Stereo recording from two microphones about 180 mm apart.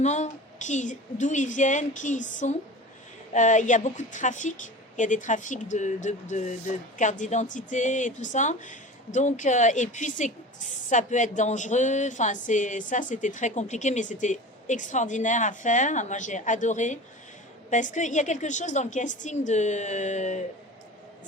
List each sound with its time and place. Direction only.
0.0 s a woman's voice: 40° left (ahead or behind)